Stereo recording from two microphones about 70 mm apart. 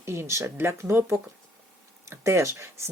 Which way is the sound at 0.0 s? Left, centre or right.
Right.